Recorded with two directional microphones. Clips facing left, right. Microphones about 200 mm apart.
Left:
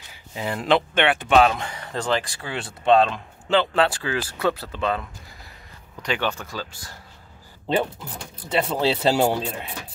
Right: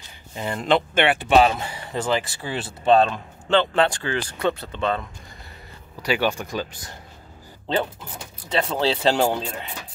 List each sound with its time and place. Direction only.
0.3 s speech: 5° left (ahead or behind)
6.0 s speech: 10° right (ahead or behind)
8.5 s speech: 5° left (ahead or behind)